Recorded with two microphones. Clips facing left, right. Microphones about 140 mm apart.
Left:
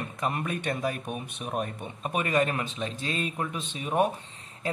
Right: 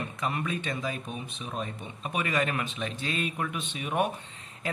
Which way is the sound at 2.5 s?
35° left (ahead or behind).